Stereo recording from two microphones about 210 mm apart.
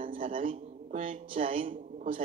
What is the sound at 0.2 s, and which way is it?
Speech, 40° right (ahead or behind).